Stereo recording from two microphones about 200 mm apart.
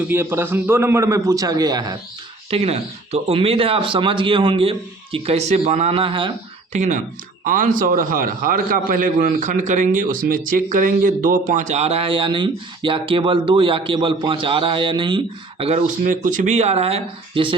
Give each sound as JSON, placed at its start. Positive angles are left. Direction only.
{"t": 0.1, "sound": "a man's voice", "side_deg": -10}
{"t": 2.5, "sound": "speech", "side_deg": -30}
{"t": 6.7, "sound": "a man's voice", "side_deg": -35}